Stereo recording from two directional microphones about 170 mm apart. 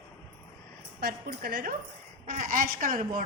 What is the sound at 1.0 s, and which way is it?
A woman's voice, 65° right (ahead or behind).